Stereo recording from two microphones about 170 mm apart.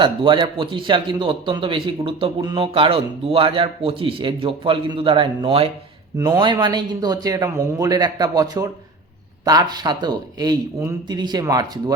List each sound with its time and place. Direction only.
0.0 s a man's voice: 30° right (ahead or behind)
6.1 s a man's voice: 20° right (ahead or behind)